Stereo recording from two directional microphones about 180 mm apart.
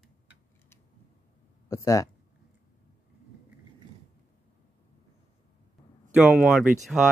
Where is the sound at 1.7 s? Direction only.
20° left (ahead or behind).